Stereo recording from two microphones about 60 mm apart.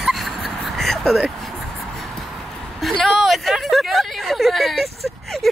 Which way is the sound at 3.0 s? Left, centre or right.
Centre.